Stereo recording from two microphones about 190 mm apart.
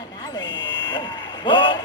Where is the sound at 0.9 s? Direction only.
25° left (ahead or behind).